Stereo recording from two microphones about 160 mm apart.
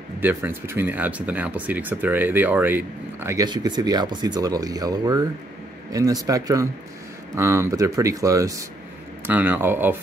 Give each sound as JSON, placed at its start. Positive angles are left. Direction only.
{"t": 0.2, "sound": "speech", "side_deg": -15}
{"t": 3.4, "sound": "speech", "side_deg": -25}